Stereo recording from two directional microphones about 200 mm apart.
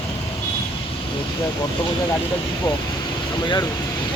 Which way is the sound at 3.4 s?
25° left (ahead or behind).